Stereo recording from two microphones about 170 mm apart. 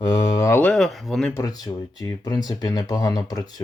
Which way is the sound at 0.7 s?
Centre (ahead or behind).